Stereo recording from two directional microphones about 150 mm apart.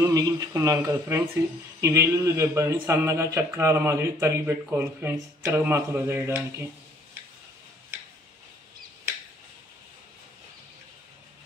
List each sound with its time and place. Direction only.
0.0 s a man's voice: 25° right (ahead or behind)